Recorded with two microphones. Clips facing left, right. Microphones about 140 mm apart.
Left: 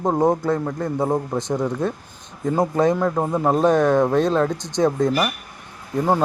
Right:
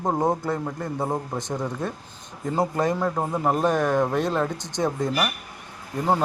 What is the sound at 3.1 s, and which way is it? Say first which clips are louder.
Speech: left 4 dB; 20° left (ahead or behind).